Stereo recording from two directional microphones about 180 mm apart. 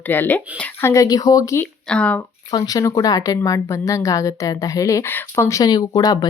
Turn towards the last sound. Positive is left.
turn(degrees=20)  # may be behind; listen again after turning